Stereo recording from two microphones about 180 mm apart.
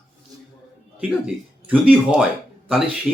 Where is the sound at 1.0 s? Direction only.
5° right (ahead or behind).